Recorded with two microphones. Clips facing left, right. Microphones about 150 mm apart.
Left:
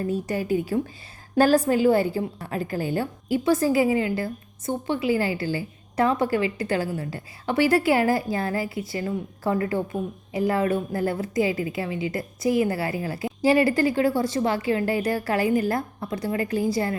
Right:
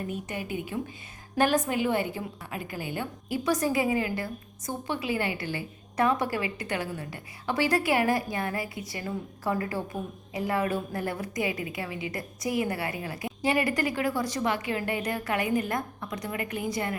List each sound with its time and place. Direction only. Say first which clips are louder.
0.1 s a woman's voice: left 9 dB; 35° left (ahead or behind)
3.2 s a woman's voice: left 6 dB; 30° left (ahead or behind)